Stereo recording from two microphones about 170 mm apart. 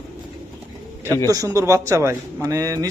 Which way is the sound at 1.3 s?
20° right (ahead or behind).